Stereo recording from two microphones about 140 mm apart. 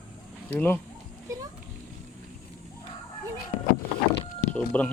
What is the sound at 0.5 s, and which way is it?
Speech, 15° left (ahead or behind).